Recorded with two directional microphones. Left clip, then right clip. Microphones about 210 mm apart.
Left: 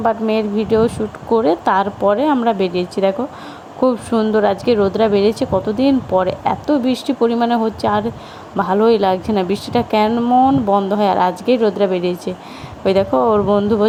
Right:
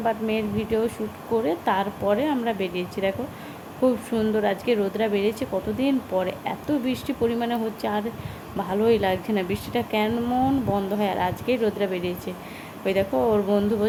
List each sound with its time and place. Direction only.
0.0 s speech: 25° left (ahead or behind)